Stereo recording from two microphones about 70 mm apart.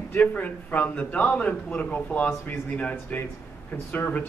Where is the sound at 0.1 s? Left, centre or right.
Left.